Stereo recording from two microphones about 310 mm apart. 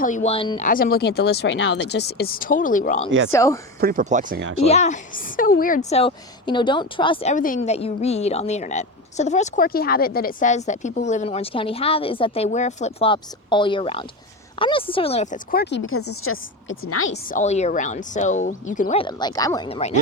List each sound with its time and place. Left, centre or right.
0.0 s a woman's voice: left
3.3 s speech: centre
3.8 s speech: right
4.6 s a woman's voice: left
17.1 s a woman's voice: left